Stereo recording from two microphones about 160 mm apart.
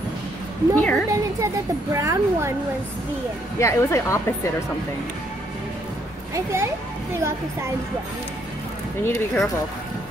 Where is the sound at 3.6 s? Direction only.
15° left (ahead or behind).